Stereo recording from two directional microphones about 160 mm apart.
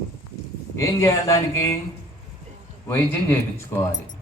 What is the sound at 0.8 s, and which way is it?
Speech, 20° left (ahead or behind).